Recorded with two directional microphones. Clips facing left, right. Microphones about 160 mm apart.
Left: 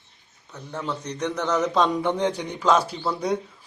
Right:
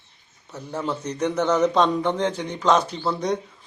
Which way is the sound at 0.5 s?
5° right (ahead or behind).